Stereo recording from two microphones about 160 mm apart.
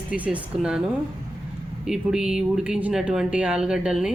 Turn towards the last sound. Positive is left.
turn(degrees=-5)  # may be behind; listen again after turning